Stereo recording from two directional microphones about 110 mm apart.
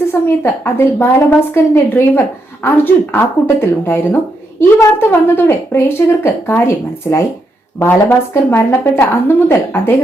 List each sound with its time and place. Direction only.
0.1 s speech: 20° left (ahead or behind)